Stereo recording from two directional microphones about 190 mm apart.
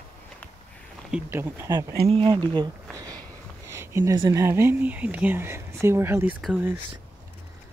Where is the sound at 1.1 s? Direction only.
10° right (ahead or behind).